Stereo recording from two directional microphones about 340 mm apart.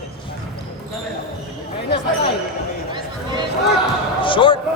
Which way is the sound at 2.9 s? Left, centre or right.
Centre.